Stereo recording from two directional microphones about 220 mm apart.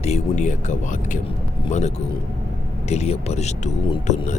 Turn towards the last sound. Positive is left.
turn(degrees=30)  # may be behind; listen again after turning